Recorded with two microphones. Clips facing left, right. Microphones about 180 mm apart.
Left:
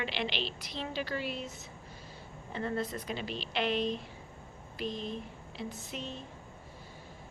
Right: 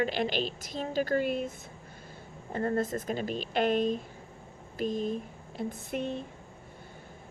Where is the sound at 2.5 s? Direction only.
45° right (ahead or behind).